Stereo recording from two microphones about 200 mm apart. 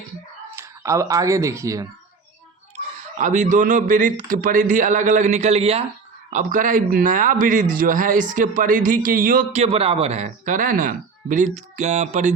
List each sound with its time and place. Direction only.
0.5 s speech: 15° right (ahead or behind)
3.2 s a man's voice: 40° right (ahead or behind)